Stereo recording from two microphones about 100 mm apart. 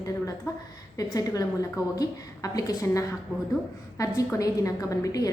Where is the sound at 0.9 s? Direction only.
35° left (ahead or behind).